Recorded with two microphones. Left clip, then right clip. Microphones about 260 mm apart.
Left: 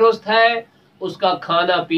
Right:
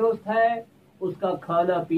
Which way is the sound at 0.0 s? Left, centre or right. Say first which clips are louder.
Left 8 dB; centre.